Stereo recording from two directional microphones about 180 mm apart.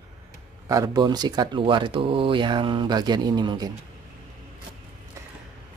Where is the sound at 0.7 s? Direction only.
20° right (ahead or behind).